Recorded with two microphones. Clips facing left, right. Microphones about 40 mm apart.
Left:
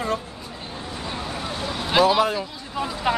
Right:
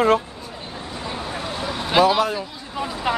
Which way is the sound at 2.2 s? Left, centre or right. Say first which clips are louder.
Even; centre.